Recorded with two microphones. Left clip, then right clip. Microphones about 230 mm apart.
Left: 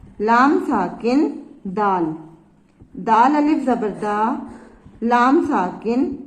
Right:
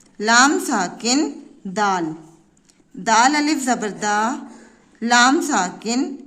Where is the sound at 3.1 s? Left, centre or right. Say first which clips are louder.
Left 1 dB; right.